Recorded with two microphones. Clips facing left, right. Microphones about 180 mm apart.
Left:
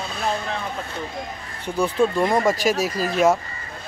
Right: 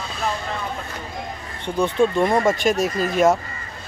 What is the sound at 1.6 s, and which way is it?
Speech, centre (ahead or behind).